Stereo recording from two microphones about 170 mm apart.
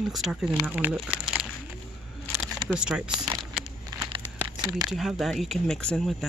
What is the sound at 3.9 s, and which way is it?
Crumpling, 25° right (ahead or behind).